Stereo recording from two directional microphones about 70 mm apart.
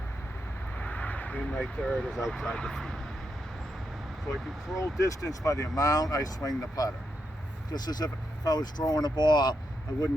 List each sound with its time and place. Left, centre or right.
0.8 s a sound: centre
1.4 s speech: centre
4.8 s speech: left
7.7 s speech: left